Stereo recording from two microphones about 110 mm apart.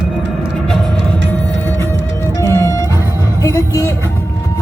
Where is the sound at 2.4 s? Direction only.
25° left (ahead or behind).